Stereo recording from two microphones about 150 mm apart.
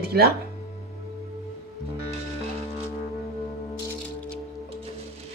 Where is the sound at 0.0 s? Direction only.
90° right.